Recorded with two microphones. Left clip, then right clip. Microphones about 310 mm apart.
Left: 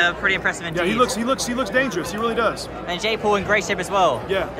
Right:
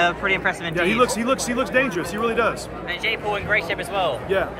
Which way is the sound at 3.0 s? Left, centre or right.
Centre.